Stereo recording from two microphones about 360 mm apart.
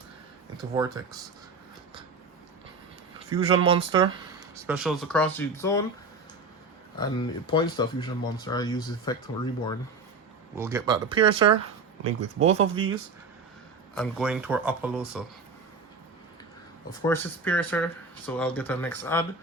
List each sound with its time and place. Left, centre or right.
0.7 s speech: centre
3.3 s speech: centre
7.0 s speech: centre
10.6 s speech: centre
12.4 s speech: centre
13.9 s speech: centre
17.0 s speech: centre